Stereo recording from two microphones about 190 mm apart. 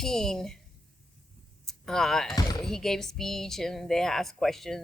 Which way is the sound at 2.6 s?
Centre (ahead or behind).